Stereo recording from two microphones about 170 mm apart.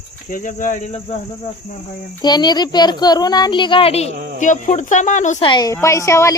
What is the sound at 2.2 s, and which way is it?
A woman's voice, 25° left (ahead or behind).